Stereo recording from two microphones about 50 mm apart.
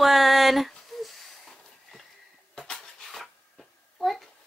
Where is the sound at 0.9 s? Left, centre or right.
Centre.